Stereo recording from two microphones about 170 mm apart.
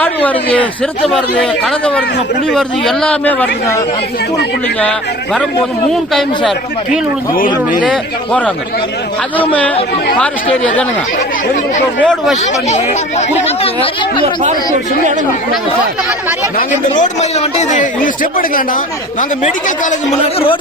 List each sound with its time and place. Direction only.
0.0 s speech: 10° left (ahead or behind)
8.3 s speech: 5° left (ahead or behind)
11.9 s speech: centre (ahead or behind)
12.6 s speech: 40° left (ahead or behind)
16.6 s a man's voice: 45° left (ahead or behind)